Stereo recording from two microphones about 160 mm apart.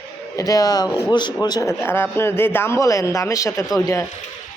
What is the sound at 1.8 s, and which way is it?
Speech, 15° left (ahead or behind).